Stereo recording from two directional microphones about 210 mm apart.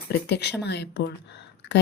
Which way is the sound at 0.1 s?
55° left (ahead or behind).